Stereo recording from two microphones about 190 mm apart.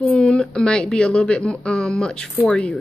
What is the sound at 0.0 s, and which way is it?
Speech, 5° left (ahead or behind).